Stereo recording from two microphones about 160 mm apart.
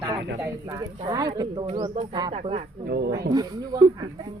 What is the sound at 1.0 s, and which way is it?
Speech, 25° right (ahead or behind).